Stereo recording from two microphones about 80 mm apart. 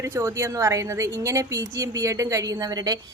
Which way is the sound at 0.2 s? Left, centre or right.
Right.